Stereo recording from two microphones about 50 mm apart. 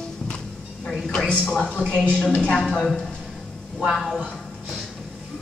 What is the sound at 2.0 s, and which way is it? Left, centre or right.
A woman's voice, centre.